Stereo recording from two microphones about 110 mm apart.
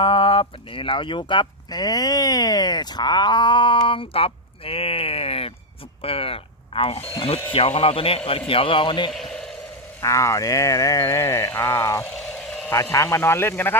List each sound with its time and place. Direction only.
0.0 s a man's voice: 50° left (ahead or behind)
9.1 s a sound: 5° left (ahead or behind)
10.0 s speech: 25° left (ahead or behind)
12.1 s vehicle: 5° left (ahead or behind)
12.7 s speech: 30° left (ahead or behind)